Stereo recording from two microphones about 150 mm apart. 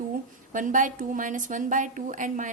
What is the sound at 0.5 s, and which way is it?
A woman's voice, 60° right (ahead or behind).